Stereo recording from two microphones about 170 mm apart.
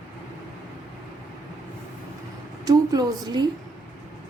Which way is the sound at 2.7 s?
25° right (ahead or behind).